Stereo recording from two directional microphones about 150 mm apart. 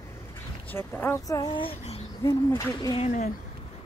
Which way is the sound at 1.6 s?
40° left (ahead or behind).